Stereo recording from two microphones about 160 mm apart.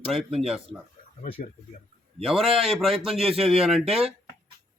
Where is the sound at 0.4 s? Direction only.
5° right (ahead or behind).